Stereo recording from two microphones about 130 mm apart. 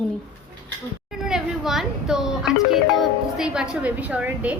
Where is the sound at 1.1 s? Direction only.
5° right (ahead or behind).